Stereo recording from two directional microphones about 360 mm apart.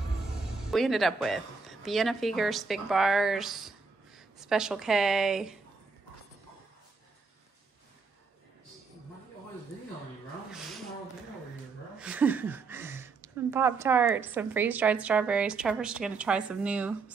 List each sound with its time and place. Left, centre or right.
0.2 s a woman's voice: centre
12.0 s speech: centre